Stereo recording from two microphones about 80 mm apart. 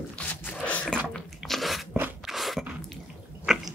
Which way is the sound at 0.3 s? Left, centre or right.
Centre.